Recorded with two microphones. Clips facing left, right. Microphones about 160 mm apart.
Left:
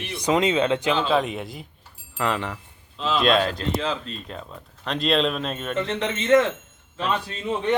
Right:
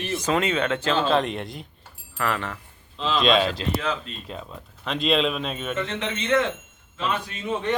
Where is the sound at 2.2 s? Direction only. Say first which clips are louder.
Left 2 dB; 20° left (ahead or behind).